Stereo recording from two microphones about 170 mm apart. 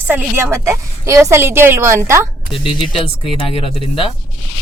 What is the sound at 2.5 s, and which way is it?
Speech, 30° left (ahead or behind).